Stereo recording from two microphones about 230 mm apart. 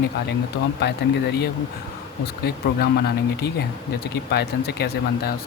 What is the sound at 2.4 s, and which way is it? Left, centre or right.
Speech, left.